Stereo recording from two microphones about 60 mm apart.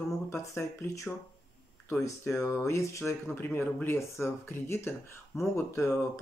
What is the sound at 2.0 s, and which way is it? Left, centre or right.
Speech, left.